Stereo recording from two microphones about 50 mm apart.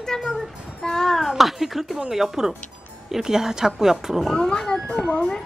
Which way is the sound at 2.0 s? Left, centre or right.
Centre.